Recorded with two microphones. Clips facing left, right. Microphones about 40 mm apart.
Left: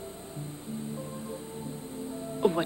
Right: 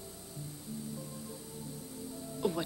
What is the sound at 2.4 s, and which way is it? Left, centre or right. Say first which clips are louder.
Music: left 8 dB; left.